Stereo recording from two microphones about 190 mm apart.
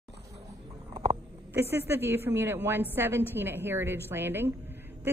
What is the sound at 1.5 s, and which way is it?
A woman's voice, 15° right (ahead or behind).